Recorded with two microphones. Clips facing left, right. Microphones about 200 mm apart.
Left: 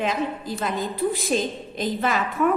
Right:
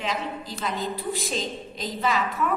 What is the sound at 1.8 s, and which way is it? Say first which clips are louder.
Speech: left 3 dB; 55° left (ahead or behind).